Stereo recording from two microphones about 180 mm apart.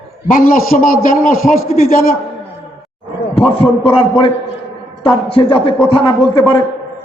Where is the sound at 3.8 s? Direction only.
30° left (ahead or behind).